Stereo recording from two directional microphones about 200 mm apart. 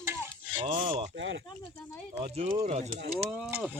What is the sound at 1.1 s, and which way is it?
Speech, 65° right (ahead or behind).